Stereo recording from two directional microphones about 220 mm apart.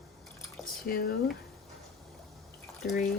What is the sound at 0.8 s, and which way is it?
Speech, 40° left (ahead or behind).